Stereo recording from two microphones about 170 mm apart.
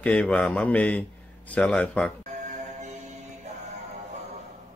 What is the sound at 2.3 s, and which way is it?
Music, 45° right (ahead or behind).